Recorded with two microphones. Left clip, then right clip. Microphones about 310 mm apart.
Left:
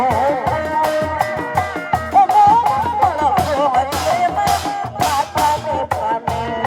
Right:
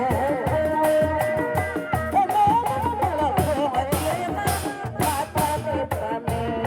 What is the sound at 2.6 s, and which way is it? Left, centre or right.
Music, left.